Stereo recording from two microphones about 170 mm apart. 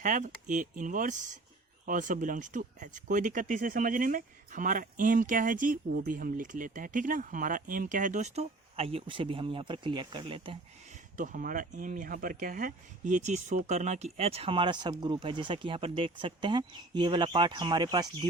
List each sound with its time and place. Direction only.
0.0 s speech: 50° right (ahead or behind); by 10.6 s 30° right (ahead or behind)
11.2 s speech: 50° right (ahead or behind); by 18.3 s 25° right (ahead or behind)